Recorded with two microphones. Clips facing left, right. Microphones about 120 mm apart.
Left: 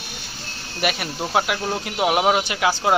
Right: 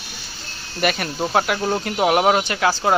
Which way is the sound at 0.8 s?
5° left (ahead or behind).